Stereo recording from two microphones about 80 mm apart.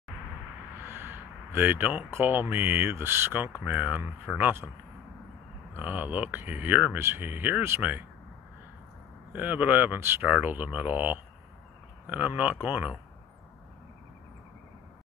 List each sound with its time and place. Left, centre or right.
0.8 s a sound: right
2.5 s speech: right
5.7 s speech: right
9.3 s speech: right